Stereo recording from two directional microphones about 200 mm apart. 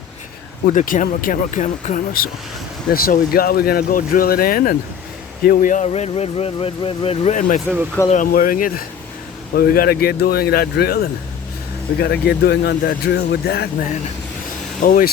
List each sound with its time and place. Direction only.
0.7 s speech: 40° left (ahead or behind)
14.8 s speech: 45° left (ahead or behind)